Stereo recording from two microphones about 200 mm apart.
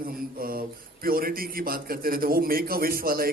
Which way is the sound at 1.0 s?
45° right (ahead or behind).